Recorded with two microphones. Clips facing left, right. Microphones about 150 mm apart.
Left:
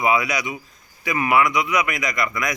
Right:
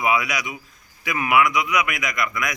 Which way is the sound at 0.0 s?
5° right (ahead or behind).